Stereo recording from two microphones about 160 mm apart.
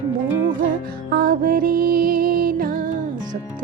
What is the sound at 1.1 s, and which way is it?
Music, 65° right (ahead or behind).